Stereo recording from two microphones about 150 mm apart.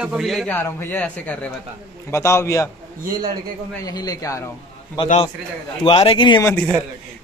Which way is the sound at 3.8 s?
25° left (ahead or behind).